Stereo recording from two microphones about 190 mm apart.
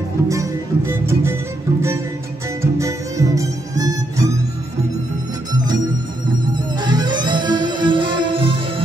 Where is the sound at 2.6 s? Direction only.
15° right (ahead or behind).